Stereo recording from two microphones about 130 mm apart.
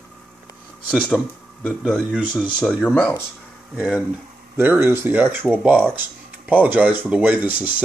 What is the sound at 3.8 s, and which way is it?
Speech, 10° right (ahead or behind).